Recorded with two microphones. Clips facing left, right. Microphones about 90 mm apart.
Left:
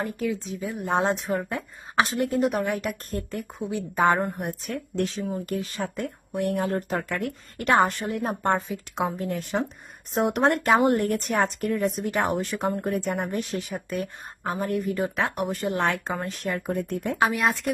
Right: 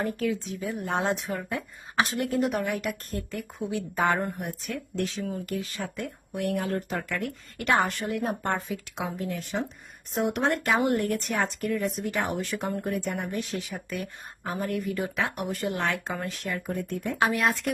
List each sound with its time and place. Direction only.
0.0 s speech: 20° left (ahead or behind)
4.4 s speech: 40° left (ahead or behind)
9.0 s speech: 40° left (ahead or behind)
10.6 s speech: 30° left (ahead or behind); by 17.2 s 55° left (ahead or behind)
17.2 s speech: 20° left (ahead or behind)